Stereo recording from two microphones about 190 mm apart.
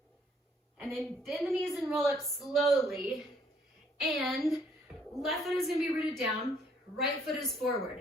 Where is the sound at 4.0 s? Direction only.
Centre (ahead or behind).